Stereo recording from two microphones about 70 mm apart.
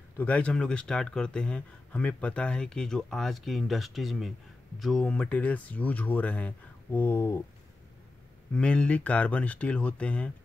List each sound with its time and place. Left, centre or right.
0.2 s speech: centre
5.0 s speech: centre
8.5 s speech: centre